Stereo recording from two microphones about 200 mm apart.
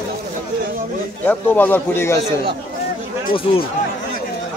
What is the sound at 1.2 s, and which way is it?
Speech, 10° left (ahead or behind).